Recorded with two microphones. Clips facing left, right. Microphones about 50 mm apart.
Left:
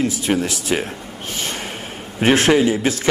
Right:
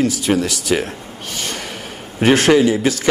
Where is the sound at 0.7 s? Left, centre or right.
Centre.